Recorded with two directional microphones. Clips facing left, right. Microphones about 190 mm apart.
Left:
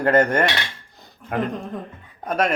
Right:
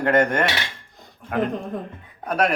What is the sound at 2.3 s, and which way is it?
Speech, centre (ahead or behind).